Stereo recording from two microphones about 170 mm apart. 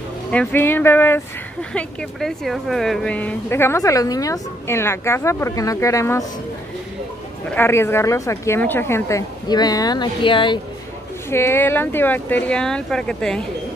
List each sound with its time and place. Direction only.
0.3 s speech: 10° left (ahead or behind)
7.4 s speech: 10° left (ahead or behind); by 10.6 s 30° left (ahead or behind)
11.2 s speech: 15° left (ahead or behind)